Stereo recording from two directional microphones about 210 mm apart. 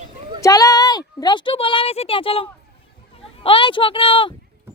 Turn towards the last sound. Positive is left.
turn(degrees=25)  # may be behind; listen again after turning